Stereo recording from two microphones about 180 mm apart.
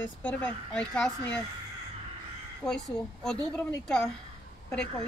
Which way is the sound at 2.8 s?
5° left (ahead or behind).